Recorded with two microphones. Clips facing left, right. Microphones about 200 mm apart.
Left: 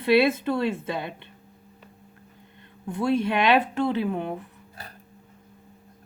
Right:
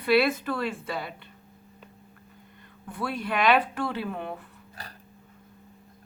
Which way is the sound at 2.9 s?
25° left (ahead or behind).